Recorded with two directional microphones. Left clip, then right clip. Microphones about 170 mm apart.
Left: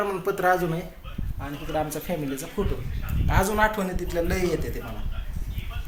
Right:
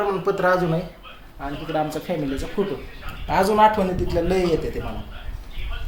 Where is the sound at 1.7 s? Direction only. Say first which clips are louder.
Right 3 dB; 15° left (ahead or behind).